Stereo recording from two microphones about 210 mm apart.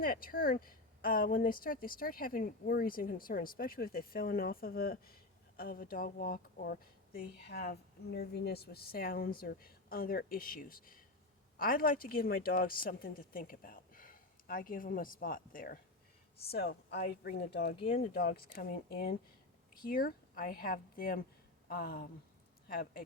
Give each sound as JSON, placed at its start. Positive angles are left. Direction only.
{"t": 0.0, "sound": "speech", "side_deg": 45}
{"t": 17.7, "sound": "speech", "side_deg": 25}
{"t": 18.1, "sound": "speech", "side_deg": 45}